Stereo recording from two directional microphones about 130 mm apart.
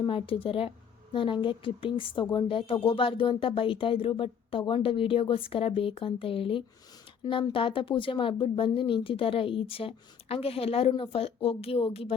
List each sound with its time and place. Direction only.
0.0 s a woman's voice: 45° left (ahead or behind)